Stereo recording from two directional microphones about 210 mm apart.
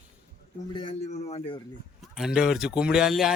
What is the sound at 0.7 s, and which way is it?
Speech, 25° left (ahead or behind).